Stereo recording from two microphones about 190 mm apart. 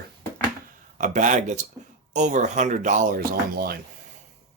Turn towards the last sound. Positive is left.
turn(degrees=-50)  # may be behind; listen again after turning